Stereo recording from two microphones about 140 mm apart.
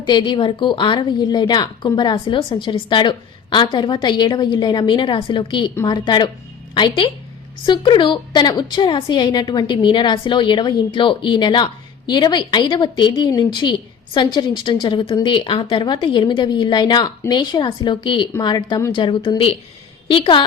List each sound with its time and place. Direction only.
0.0 s a woman's voice: 35° left (ahead or behind)